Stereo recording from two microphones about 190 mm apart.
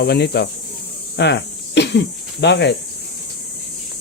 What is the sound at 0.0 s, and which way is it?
Speech, 60° left (ahead or behind).